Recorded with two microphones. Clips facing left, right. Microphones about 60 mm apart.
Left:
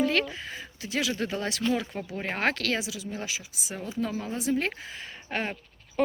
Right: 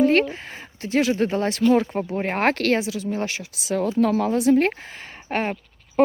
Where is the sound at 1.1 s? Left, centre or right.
Right.